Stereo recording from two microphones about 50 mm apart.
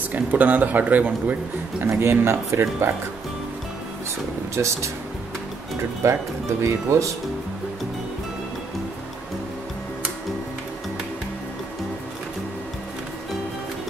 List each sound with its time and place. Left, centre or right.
0.1 s speech: right
1.9 s speech: right
4.6 s speech: right
6.0 s speech: right